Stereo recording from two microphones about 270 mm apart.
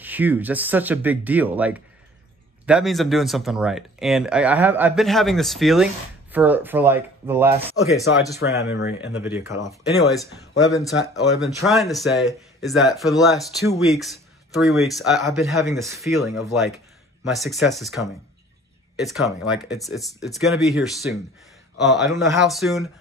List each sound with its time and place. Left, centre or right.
0.0 s speech: centre
7.8 s speech: left
9.2 s speech: centre
11.0 s speech: centre
15.8 s speech: centre
19.0 s speech: centre